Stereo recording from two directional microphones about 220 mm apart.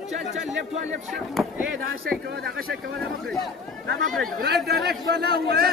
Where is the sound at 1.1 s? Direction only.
Centre (ahead or behind).